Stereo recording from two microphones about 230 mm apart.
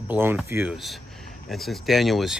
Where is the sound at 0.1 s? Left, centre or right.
Centre.